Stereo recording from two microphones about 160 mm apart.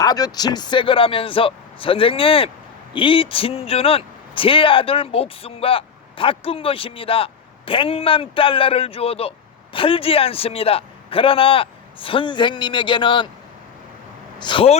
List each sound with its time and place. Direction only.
0.0 s speech: 25° left (ahead or behind)
14.3 s speech: 30° left (ahead or behind)